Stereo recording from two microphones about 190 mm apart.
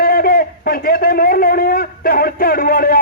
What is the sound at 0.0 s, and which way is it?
A man's voice, 50° left (ahead or behind).